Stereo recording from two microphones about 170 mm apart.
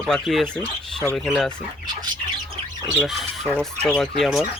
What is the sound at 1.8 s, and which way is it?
Bird, 25° right (ahead or behind).